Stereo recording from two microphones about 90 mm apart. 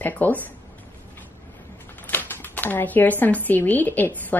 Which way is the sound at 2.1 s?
20° left (ahead or behind).